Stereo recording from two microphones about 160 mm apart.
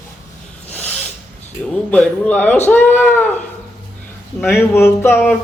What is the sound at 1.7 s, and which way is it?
Speech, 5° left (ahead or behind).